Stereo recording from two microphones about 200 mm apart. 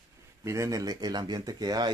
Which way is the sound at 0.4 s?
15° right (ahead or behind).